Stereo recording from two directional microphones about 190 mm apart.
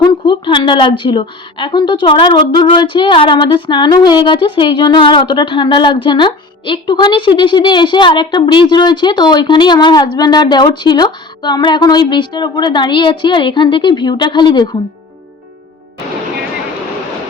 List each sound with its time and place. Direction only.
0.0 s a woman's voice: 25° left (ahead or behind)